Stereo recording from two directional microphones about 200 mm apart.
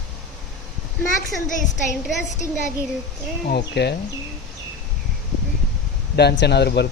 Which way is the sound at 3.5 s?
55° left (ahead or behind).